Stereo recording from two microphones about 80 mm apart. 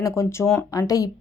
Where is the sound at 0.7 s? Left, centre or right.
Left.